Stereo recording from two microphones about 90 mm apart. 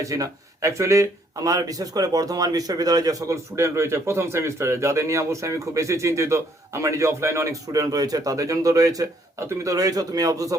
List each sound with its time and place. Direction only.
0.0 s speech: 35° right (ahead or behind)